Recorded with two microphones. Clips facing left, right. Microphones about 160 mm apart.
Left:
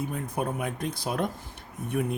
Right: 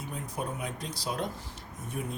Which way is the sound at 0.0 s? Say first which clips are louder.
Left 6 dB; 55° left (ahead or behind).